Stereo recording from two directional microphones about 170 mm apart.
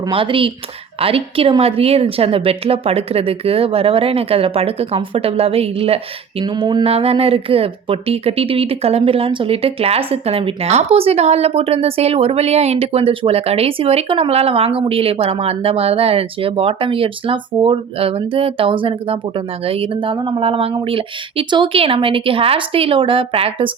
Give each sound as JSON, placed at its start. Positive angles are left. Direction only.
{"t": 0.0, "sound": "speech", "side_deg": -30}